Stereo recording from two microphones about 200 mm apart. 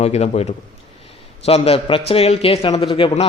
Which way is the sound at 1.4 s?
30° left (ahead or behind).